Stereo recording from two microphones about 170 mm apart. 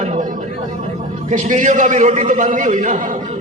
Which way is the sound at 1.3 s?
45° right (ahead or behind).